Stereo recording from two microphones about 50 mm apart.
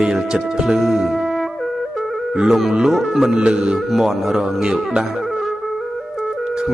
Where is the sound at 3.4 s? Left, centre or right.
Centre.